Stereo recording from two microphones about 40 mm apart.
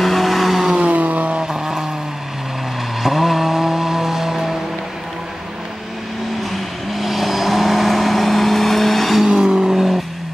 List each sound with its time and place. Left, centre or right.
0.0 s vehicle: centre
0.7 s vehicle: right
1.5 s vehicle: centre
3.0 s vehicle: centre
6.9 s vehicle: centre
9.2 s vehicle: centre